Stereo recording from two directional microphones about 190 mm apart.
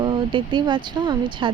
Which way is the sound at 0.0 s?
25° right (ahead or behind).